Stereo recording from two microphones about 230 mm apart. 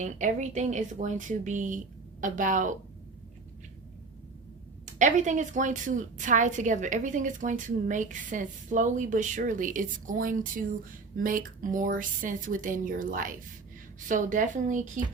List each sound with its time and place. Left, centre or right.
0.0 s a woman's voice: right
4.9 s a woman's voice: right